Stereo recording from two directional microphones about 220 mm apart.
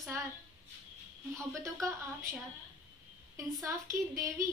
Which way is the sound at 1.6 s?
15° right (ahead or behind).